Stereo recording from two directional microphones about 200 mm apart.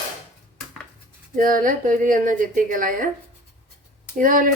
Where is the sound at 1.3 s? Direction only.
45° right (ahead or behind).